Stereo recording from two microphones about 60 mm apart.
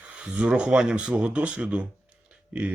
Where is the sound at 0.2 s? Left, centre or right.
Centre.